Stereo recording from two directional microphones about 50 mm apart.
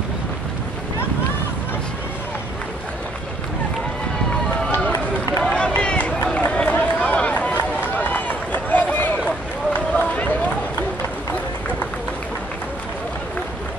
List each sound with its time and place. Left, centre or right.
5.4 s run: centre
7.5 s run: left